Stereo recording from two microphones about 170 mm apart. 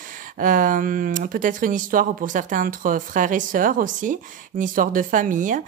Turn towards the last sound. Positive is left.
turn(degrees=-50)  # may be behind; listen again after turning